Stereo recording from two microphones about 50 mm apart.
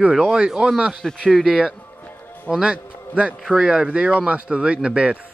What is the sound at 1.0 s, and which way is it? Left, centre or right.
Speech, centre.